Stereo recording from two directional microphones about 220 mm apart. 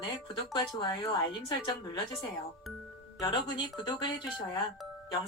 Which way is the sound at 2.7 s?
Centre (ahead or behind).